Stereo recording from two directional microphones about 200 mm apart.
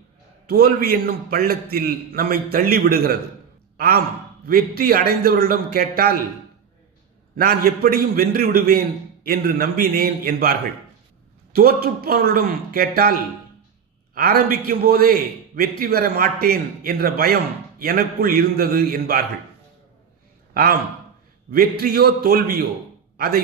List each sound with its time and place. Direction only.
0.5 s a man's voice: 50° right (ahead or behind)
7.3 s a man's voice: 50° right (ahead or behind)
21.5 s a man's voice: 50° right (ahead or behind)